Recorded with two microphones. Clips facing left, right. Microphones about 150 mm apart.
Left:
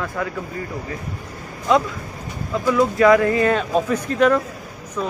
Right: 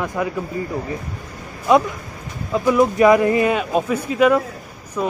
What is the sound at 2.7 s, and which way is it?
Speech, 20° right (ahead or behind).